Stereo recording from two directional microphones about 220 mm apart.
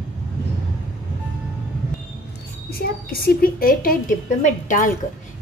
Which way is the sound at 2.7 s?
45° left (ahead or behind).